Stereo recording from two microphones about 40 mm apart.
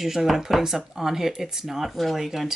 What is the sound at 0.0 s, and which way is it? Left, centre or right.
Speech, centre.